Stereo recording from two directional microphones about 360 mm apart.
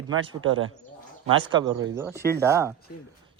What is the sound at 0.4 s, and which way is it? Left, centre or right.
Speech, right.